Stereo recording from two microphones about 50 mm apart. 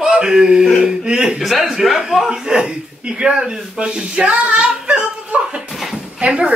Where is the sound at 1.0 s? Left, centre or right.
Centre.